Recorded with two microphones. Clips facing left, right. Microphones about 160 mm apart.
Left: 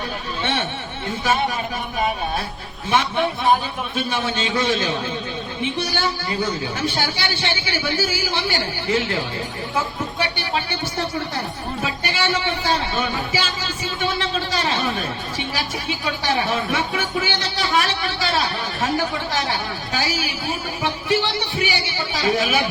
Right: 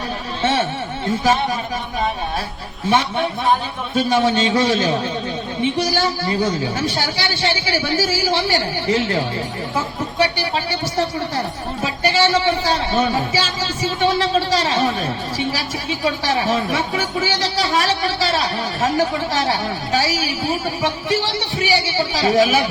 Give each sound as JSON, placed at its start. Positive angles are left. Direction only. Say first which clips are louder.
{"t": 2.9, "sound": "speech", "louder": "right 1 dB", "side_deg": -30}